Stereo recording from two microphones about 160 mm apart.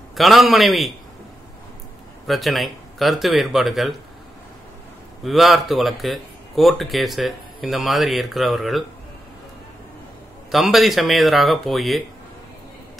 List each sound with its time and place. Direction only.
0.1 s speech: centre (ahead or behind)
2.2 s speech: centre (ahead or behind)
5.2 s speech: centre (ahead or behind)
10.5 s speech: centre (ahead or behind)